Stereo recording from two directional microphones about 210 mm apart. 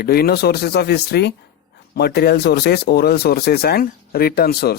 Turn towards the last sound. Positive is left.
turn(degrees=50)  # may be behind; listen again after turning